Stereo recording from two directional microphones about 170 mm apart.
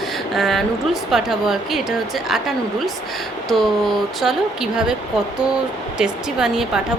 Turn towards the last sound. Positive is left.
turn(degrees=-5)  # may be behind; listen again after turning